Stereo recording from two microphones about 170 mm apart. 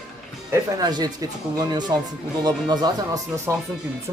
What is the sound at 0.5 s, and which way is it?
Speech, 25° right (ahead or behind).